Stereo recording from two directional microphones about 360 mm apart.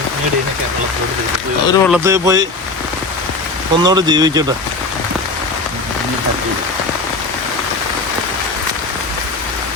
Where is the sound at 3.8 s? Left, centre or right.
Centre.